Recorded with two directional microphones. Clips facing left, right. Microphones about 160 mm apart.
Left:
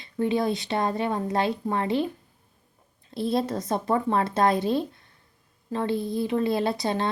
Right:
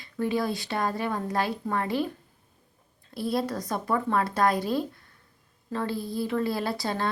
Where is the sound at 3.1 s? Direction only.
25° left (ahead or behind).